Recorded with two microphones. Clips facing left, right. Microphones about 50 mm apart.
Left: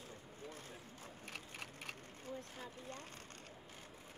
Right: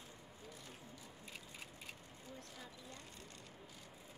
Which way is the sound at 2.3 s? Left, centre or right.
Left.